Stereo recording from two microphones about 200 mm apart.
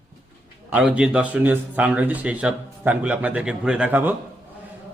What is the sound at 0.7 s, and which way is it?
Speech, 5° right (ahead or behind).